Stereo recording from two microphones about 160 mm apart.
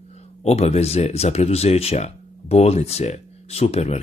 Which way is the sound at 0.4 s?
40° left (ahead or behind).